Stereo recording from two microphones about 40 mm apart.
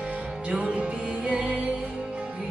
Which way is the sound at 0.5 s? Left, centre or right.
Right.